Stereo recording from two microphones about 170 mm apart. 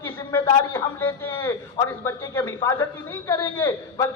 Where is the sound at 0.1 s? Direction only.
15° left (ahead or behind).